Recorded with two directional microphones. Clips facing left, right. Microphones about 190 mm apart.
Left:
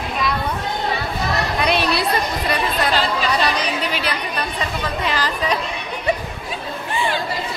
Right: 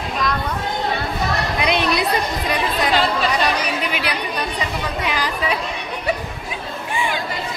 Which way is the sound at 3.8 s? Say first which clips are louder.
Even; 10° right (ahead or behind).